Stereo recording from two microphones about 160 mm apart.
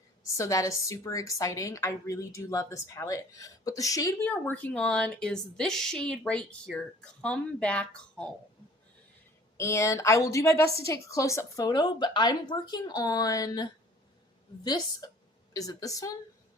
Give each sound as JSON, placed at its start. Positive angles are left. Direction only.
{"t": 0.3, "sound": "a woman's voice", "side_deg": 20}
{"t": 4.3, "sound": "a woman's voice", "side_deg": 10}
{"t": 9.6, "sound": "a woman's voice", "side_deg": 15}